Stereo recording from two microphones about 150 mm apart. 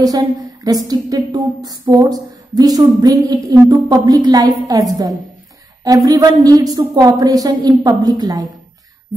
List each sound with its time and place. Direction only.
0.0 s a woman's voice: 25° right (ahead or behind)